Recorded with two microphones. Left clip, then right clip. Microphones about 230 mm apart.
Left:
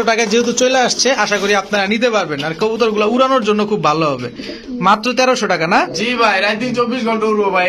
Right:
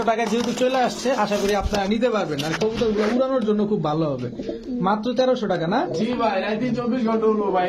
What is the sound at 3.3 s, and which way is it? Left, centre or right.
Speech, left.